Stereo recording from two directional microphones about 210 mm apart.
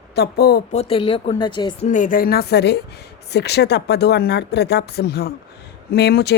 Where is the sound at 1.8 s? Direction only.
35° left (ahead or behind).